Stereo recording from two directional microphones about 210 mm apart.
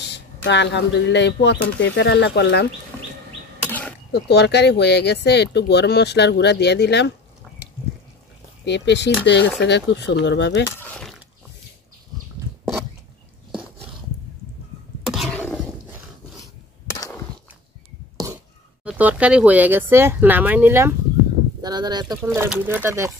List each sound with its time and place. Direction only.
0.1 s speech: 55° left (ahead or behind)
4.1 s speech: 55° left (ahead or behind)
8.6 s speech: 55° left (ahead or behind)
10.8 s a sound: 5° left (ahead or behind)
15.0 s cough: centre (ahead or behind)
17.0 s a sound: 10° left (ahead or behind)
18.1 s whispering: 15° right (ahead or behind)
18.9 s speech: 5° right (ahead or behind)